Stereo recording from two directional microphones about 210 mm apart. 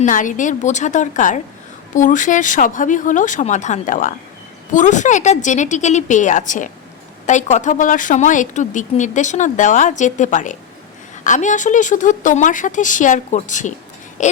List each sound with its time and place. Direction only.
0.0 s speech: 40° left (ahead or behind)